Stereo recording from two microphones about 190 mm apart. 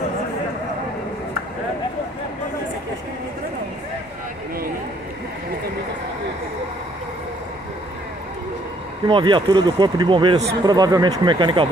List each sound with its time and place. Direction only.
9.0 s speech: 25° right (ahead or behind)